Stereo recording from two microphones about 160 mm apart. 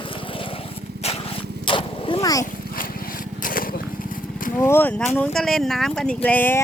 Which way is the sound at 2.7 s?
65° left (ahead or behind).